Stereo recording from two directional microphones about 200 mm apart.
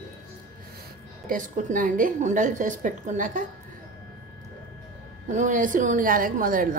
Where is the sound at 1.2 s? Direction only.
40° right (ahead or behind).